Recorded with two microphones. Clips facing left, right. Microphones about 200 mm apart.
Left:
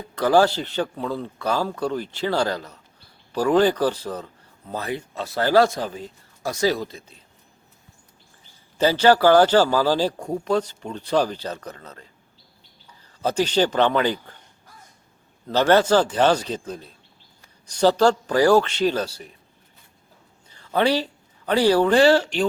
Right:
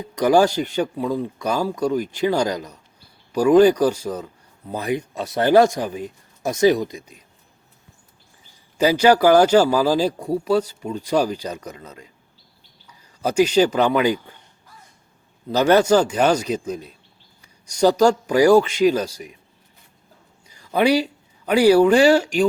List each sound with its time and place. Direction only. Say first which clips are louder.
0.0 s speech: right 2 dB; 15° right (ahead or behind)
8.8 s speech: right 1 dB; 10° right (ahead or behind)
13.2 s speech: right 4 dB; 10° right (ahead or behind)
15.4 s speech: right 2 dB; 10° right (ahead or behind)
20.5 s speech: right 3 dB; 10° right (ahead or behind)